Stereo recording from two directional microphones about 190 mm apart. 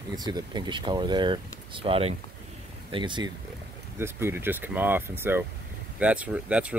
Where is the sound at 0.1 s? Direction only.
20° right (ahead or behind).